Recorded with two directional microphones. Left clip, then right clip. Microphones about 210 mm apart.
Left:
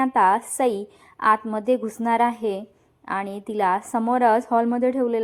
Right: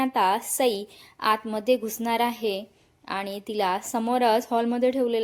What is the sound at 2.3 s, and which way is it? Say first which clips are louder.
Speech: left 2 dB; 55° left (ahead or behind).